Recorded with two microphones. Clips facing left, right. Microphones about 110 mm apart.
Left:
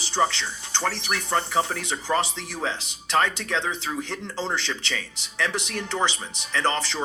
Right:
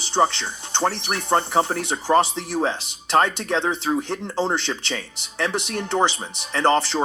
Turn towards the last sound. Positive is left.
turn(degrees=-35)  # may be behind; listen again after turning